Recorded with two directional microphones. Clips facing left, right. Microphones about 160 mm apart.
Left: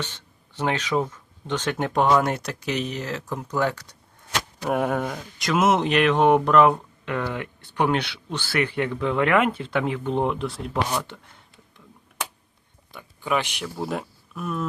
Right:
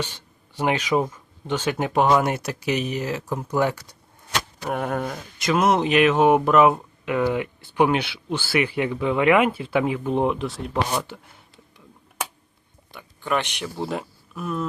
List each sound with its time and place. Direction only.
0.0 s speech: 10° right (ahead or behind)
4.6 s speech: centre (ahead or behind)
12.9 s speech: centre (ahead or behind)